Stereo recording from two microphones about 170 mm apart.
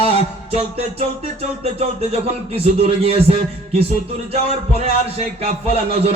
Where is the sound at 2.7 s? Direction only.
35° right (ahead or behind).